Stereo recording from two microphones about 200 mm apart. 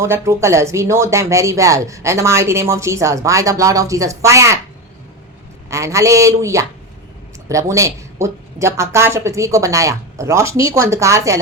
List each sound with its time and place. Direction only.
0.0 s speech: 15° right (ahead or behind)
5.7 s speech: 15° right (ahead or behind)